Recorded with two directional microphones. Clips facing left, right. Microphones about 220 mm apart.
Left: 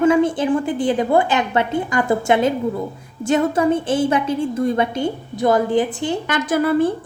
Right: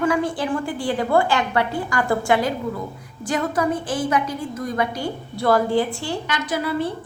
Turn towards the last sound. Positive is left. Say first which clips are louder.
# left 7 dB
turn(degrees=50)  # may be behind; listen again after turning